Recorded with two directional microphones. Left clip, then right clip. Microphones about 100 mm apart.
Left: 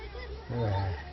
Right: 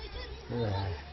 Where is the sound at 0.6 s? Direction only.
30° right (ahead or behind).